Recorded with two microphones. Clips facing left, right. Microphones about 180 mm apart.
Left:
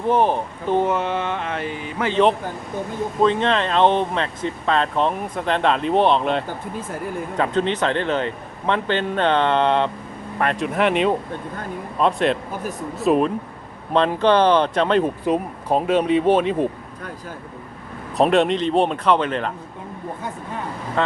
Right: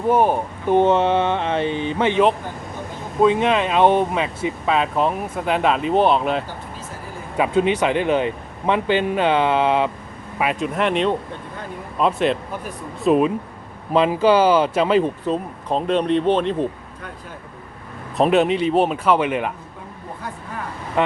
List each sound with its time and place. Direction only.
0.1 s speech: 10° right (ahead or behind)
0.8 s speech: 25° right (ahead or behind)
3.2 s speech: 10° right (ahead or behind)
15.0 s speech: 10° left (ahead or behind)
18.2 s speech: 5° right (ahead or behind)